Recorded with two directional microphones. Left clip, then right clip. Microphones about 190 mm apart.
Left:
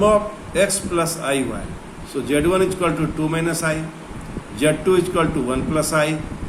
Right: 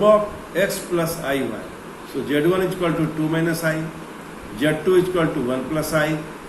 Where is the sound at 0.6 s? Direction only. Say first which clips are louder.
Left 2 dB; 35° left (ahead or behind).